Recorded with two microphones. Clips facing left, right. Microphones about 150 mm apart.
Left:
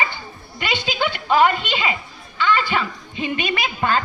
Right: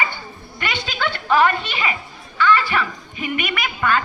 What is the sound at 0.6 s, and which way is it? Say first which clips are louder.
A woman's voice: left 2 dB; 15° left (ahead or behind).